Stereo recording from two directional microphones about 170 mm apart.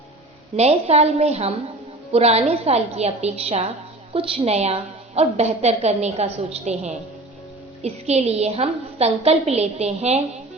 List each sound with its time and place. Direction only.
0.5 s a woman's voice: 40° right (ahead or behind)